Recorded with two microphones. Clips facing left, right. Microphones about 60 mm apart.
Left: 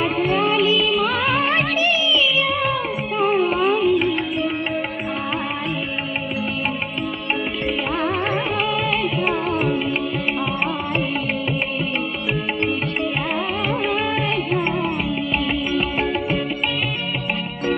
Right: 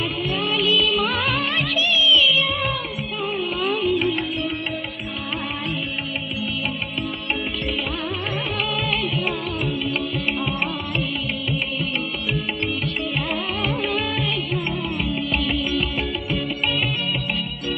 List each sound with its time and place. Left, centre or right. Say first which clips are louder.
0.0 s music: left 6 dB; left
1.0 s music of bollywood: left 3 dB; centre
1.4 s music of bollywood: left 4 dB; left
3.2 s music: left 9 dB; left
3.7 s music: left 4 dB; centre